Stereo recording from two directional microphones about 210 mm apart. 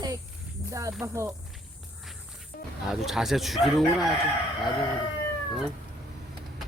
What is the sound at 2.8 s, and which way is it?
Speech, centre (ahead or behind).